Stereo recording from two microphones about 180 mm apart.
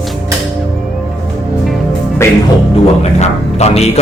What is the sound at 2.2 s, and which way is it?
Music, 15° left (ahead or behind).